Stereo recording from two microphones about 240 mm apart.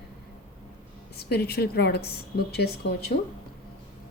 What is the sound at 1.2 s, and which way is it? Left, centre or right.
Speech, left.